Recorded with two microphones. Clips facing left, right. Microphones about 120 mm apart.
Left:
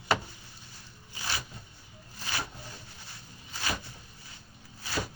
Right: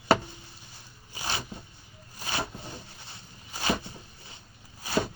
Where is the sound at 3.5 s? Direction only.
20° right (ahead or behind).